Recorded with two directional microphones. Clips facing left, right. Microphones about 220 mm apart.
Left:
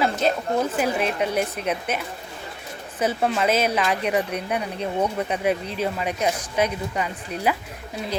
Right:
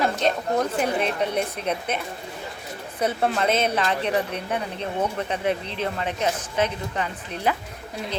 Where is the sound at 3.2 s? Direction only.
5° left (ahead or behind).